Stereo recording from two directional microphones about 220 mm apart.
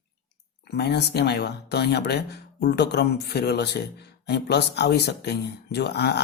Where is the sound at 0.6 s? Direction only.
50° left (ahead or behind).